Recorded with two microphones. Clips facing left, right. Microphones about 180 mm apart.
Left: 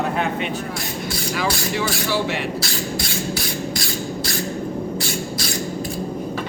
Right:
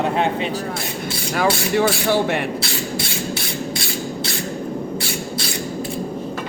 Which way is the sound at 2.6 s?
25° right (ahead or behind).